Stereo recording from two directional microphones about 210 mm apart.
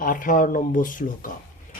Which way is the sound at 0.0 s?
40° left (ahead or behind).